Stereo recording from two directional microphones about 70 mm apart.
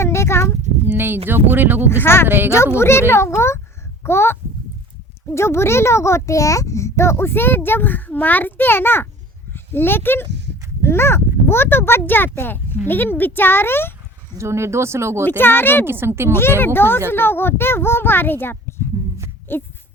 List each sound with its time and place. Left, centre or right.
0.0 s a sound: left
0.9 s speech: right
1.9 s a child's voice: left
2.2 s speech: right
2.7 s a child's voice: left
14.3 s speech: right
15.2 s a child's voice: left
15.9 s speech: right
16.3 s a child's voice: left